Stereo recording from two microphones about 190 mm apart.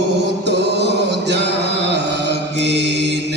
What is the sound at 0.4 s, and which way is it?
Mantra, 60° right (ahead or behind).